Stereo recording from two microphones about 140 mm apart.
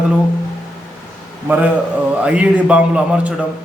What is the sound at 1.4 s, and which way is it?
Speech, 15° right (ahead or behind).